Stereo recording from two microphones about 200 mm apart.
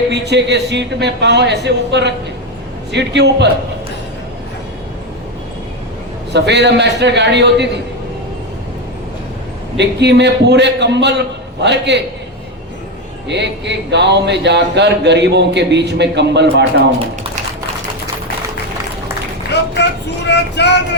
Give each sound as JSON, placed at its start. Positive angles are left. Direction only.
{"t": 0.1, "sound": "speech", "side_deg": -60}
{"t": 6.3, "sound": "speech", "side_deg": -60}
{"t": 9.7, "sound": "speech", "side_deg": -60}
{"t": 13.2, "sound": "speech", "side_deg": -60}
{"t": 19.7, "sound": "child singing", "side_deg": 60}